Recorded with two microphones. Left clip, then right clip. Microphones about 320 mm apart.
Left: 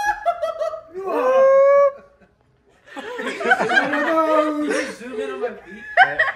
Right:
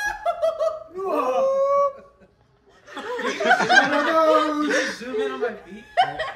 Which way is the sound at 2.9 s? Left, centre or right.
Centre.